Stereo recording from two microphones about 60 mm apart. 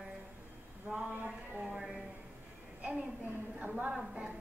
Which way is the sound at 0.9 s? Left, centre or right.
Centre.